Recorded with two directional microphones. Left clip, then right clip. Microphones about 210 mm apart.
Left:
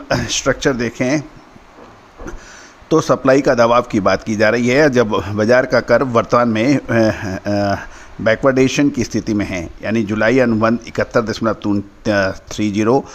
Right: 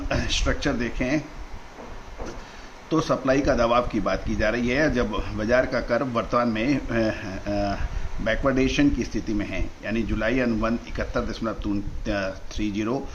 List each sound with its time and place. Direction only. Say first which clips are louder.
0.1 s a man's voice: left 9 dB; 50° left (ahead or behind)
2.9 s a man's voice: left 10 dB; 50° left (ahead or behind)